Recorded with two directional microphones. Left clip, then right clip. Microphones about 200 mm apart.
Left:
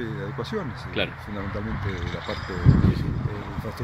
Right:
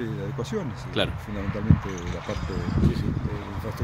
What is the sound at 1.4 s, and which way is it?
Speech, 25° right (ahead or behind).